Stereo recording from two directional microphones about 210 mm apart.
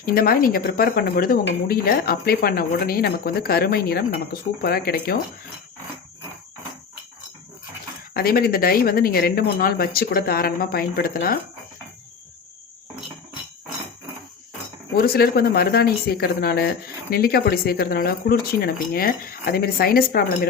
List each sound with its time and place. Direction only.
0.0 s speech: 45° left (ahead or behind)
8.1 s speech: 45° left (ahead or behind)
14.9 s speech: 45° left (ahead or behind)